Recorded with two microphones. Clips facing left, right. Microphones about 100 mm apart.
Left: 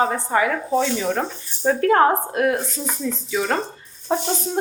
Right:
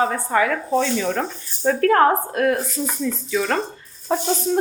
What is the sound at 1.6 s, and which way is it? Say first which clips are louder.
Speech: even; 20° left (ahead or behind).